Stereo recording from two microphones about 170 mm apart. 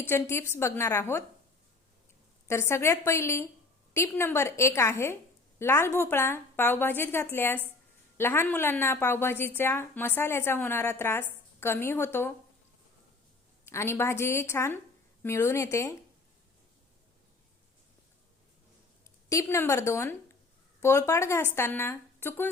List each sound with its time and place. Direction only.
0.1 s a woman's voice: 15° left (ahead or behind)
2.5 s a woman's voice: 15° left (ahead or behind)
13.7 s a woman's voice: 15° left (ahead or behind)
19.3 s a woman's voice: 15° left (ahead or behind)